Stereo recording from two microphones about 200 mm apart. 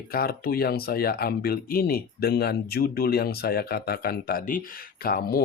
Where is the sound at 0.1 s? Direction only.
50° left (ahead or behind).